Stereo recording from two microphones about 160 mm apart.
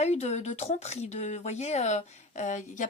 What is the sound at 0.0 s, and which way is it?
A woman's voice, 45° left (ahead or behind).